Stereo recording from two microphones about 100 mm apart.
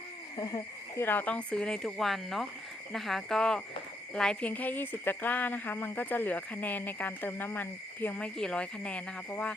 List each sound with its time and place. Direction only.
0.3 s speech: 40° left (ahead or behind)
0.9 s speech: 20° left (ahead or behind)